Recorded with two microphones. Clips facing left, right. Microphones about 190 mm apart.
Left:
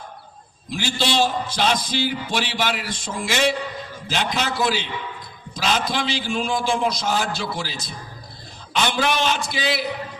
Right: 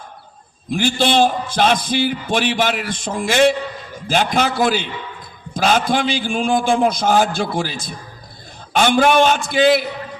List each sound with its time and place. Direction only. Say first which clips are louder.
0.7 s a man's voice: right 7 dB; 55° right (ahead or behind)